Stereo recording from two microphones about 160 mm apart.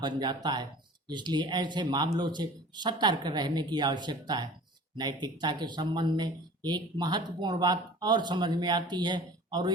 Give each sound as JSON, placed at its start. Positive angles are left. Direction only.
{"t": 0.0, "sound": "speech", "side_deg": -25}